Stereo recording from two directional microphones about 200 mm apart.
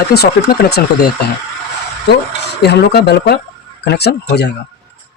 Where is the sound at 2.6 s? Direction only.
55° left (ahead or behind).